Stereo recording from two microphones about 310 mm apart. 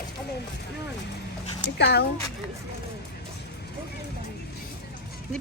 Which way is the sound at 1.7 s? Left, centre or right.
Left.